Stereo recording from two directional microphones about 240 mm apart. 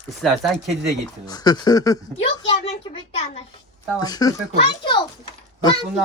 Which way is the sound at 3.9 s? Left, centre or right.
Centre.